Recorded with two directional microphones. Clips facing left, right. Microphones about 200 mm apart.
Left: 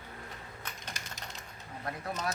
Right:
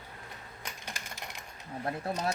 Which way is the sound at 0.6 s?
15° right (ahead or behind).